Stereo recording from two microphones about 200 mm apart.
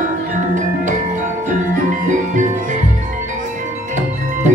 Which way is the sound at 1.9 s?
40° right (ahead or behind).